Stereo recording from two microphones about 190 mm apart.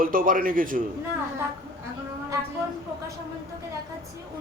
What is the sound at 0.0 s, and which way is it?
Speech, 50° right (ahead or behind).